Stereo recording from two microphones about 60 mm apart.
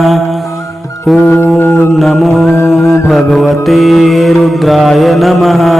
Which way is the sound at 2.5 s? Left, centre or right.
Left.